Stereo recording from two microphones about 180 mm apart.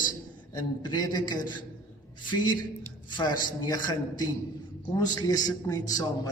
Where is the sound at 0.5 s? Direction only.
25° left (ahead or behind).